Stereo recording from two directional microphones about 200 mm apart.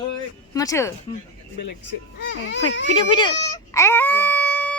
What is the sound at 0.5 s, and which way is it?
Speech, 15° left (ahead or behind).